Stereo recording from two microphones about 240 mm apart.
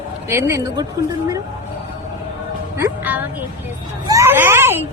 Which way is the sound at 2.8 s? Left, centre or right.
Centre.